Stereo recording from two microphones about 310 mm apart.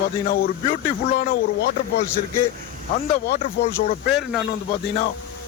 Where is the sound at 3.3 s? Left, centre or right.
Left.